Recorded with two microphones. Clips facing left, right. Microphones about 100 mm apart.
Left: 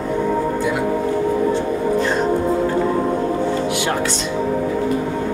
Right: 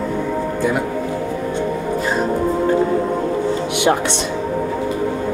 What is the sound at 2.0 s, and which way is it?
Music, 5° right (ahead or behind).